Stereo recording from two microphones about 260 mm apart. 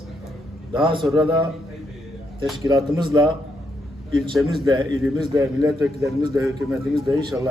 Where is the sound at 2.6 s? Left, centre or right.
Centre.